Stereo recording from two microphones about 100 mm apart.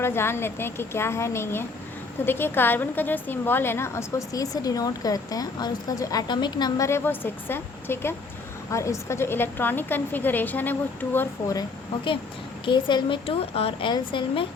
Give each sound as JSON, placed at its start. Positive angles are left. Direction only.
{"t": 0.0, "sound": "a woman's voice", "side_deg": 25}
{"t": 6.8, "sound": "a woman's voice", "side_deg": 25}
{"t": 12.6, "sound": "a woman's voice", "side_deg": 55}
{"t": 13.9, "sound": "a woman's voice", "side_deg": 55}